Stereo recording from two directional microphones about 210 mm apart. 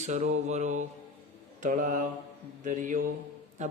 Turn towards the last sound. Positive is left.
turn(degrees=-35)  # may be behind; listen again after turning